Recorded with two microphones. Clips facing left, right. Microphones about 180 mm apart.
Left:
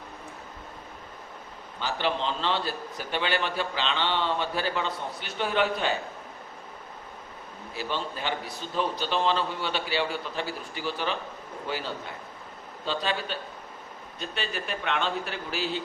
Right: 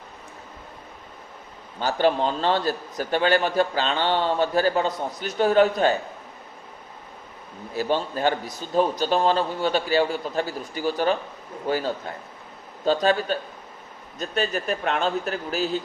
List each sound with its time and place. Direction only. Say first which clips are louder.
1.8 s a man's voice: right 7 dB; 45° right (ahead or behind)
7.8 s a man's voice: right 8 dB; 45° right (ahead or behind)